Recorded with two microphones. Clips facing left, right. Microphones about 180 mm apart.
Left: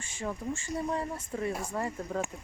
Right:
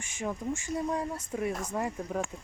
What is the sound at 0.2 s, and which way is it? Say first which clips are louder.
Speech: right 2 dB; 10° right (ahead or behind).